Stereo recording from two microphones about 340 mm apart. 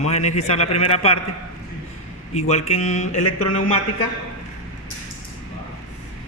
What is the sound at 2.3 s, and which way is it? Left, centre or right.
Speech, centre.